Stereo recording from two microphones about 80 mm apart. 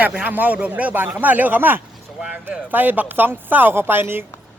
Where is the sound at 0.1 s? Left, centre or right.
Centre.